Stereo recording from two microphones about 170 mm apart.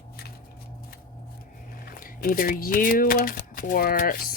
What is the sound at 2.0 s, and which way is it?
Speech, 55° left (ahead or behind).